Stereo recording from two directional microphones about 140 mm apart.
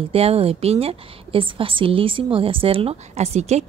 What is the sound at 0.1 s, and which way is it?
A woman's voice, 45° right (ahead or behind).